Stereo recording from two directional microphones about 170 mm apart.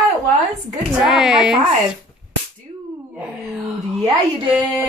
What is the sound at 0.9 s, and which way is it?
Speech, 5° right (ahead or behind).